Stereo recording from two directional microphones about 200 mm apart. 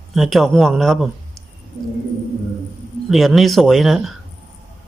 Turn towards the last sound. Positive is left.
turn(degrees=0)  # may be behind; listen again after turning